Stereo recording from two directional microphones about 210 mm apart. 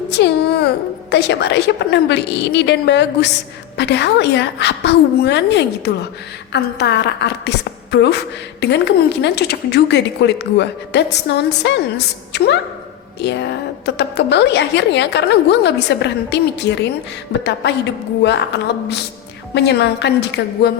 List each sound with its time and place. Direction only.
0.1 s a woman's voice: 55° left (ahead or behind)
19.5 s speech: 55° left (ahead or behind)